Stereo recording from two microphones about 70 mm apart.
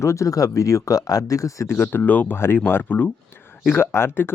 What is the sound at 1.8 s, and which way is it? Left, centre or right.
Speech, left.